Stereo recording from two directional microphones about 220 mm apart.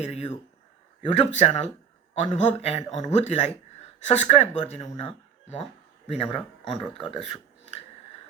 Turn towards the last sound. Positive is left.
turn(degrees=30)  # may be behind; listen again after turning